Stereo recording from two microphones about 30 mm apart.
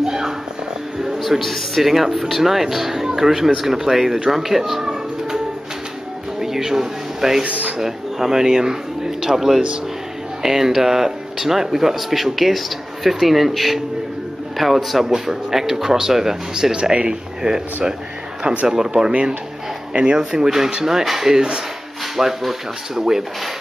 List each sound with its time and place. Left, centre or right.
0.0 s music: centre
1.4 s a man's voice: centre
1.9 s speech: centre
6.4 s a sound: centre
7.4 s speech: right
7.8 s a man's voice: centre
16.9 s speech: right
18.7 s speech: right
19.9 s speech: right
20.4 s speech: centre